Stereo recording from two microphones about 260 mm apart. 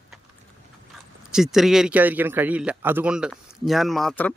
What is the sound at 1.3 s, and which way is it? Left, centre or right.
A man's voice, centre.